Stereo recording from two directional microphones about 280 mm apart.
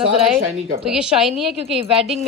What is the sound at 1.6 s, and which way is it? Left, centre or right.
Speech, centre.